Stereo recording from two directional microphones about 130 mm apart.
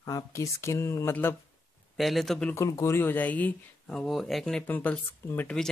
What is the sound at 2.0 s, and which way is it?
Speech, centre (ahead or behind).